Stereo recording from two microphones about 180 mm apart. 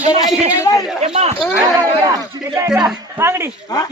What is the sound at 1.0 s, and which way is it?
Speech, 35° right (ahead or behind).